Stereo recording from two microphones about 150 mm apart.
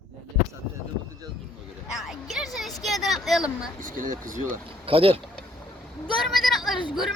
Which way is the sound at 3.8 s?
60° right (ahead or behind).